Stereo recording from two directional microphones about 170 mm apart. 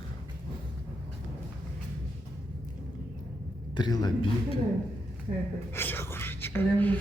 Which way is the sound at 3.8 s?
25° left (ahead or behind).